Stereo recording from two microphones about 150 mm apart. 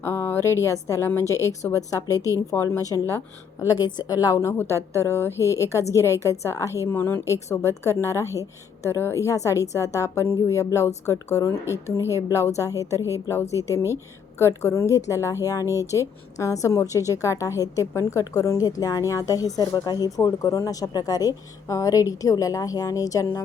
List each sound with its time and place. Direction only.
0.0 s a woman's voice: 15° left (ahead or behind)
12.5 s a woman's voice: 20° left (ahead or behind)
13.0 s a woman's voice: 20° right (ahead or behind)
13.2 s a woman's voice: 20° left (ahead or behind)